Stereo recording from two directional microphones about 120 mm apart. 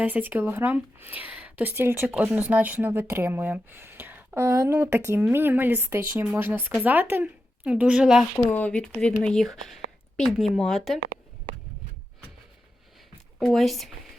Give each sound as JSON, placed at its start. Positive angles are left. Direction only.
{"t": 0.0, "sound": "speech", "side_deg": -15}
{"t": 8.4, "sound": "speech", "side_deg": 10}
{"t": 13.4, "sound": "speech", "side_deg": 0}